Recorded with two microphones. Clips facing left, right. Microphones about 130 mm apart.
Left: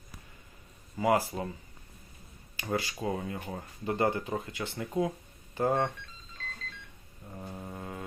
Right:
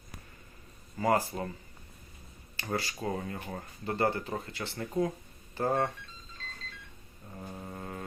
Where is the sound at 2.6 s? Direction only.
15° left (ahead or behind).